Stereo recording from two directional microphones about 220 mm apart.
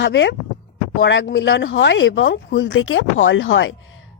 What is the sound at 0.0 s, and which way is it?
Speech, 55° left (ahead or behind).